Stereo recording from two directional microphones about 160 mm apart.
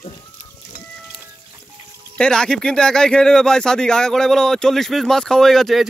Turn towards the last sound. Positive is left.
turn(degrees=0)  # may be behind; listen again after turning